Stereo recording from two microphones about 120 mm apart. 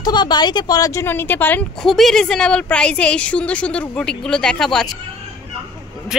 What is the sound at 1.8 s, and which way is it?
A woman's voice, centre (ahead or behind).